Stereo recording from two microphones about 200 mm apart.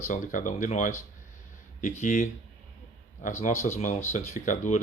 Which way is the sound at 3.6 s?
35° left (ahead or behind).